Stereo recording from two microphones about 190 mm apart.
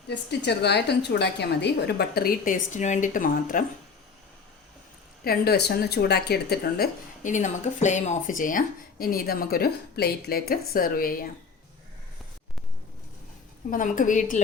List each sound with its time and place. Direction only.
0.1 s a woman's voice: 60° left (ahead or behind); by 3.6 s 45° left (ahead or behind)
5.2 s speech: 55° left (ahead or behind)
13.7 s speech: 45° left (ahead or behind)